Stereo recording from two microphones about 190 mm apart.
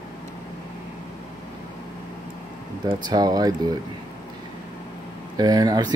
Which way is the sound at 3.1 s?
20° right (ahead or behind).